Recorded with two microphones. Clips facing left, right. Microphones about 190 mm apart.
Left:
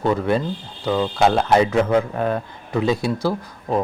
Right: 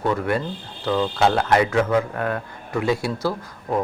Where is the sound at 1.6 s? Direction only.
25° left (ahead or behind).